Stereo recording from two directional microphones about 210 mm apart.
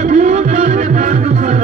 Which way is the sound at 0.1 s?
35° right (ahead or behind).